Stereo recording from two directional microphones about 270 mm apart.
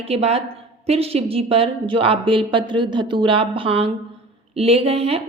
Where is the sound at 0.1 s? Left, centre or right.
Right.